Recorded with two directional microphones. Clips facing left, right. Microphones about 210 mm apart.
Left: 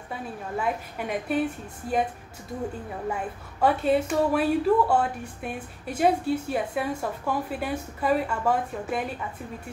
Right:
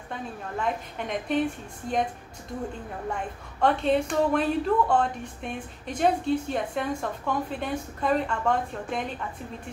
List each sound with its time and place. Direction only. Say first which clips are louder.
0.1 s a woman's voice: left 2 dB; 5° left (ahead or behind)
3.1 s a woman's voice: left 2 dB; 5° left (ahead or behind)